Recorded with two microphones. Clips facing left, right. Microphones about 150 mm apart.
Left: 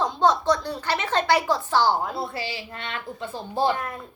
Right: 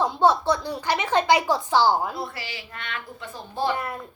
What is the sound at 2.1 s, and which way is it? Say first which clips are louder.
Speech: left 3 dB; 25° left (ahead or behind).